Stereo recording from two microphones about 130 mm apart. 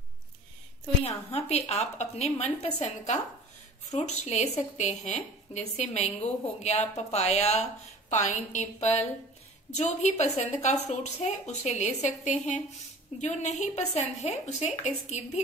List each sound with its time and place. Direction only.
1.0 s a woman's voice: 55° left (ahead or behind)
8.1 s a woman's voice: 70° left (ahead or behind)
9.8 s a woman's voice: 60° left (ahead or behind)